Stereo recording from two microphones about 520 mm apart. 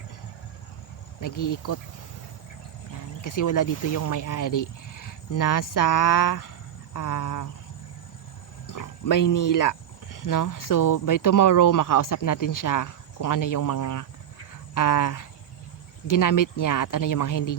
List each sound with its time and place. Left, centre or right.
1.2 s speech: left
3.2 s speech: left
8.6 s speech: left